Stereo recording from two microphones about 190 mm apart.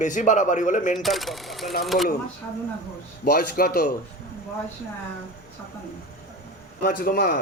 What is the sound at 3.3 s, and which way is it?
Speech, 50° left (ahead or behind).